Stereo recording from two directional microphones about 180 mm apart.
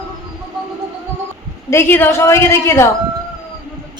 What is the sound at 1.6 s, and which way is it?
A woman's voice, 15° left (ahead or behind).